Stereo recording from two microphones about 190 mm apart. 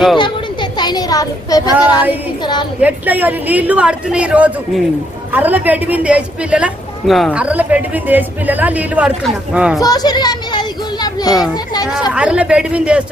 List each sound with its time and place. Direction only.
0.2 s speech: 25° left (ahead or behind)
2.8 s a man's voice: 10° right (ahead or behind)
9.8 s speech: 20° left (ahead or behind)
12.1 s speech: 5° right (ahead or behind)